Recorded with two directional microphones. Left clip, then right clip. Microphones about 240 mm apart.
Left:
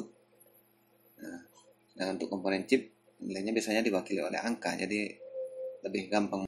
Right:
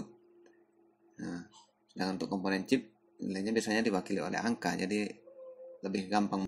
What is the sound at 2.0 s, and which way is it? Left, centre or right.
Speech, right.